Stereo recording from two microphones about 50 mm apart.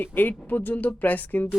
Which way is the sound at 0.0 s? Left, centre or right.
Left.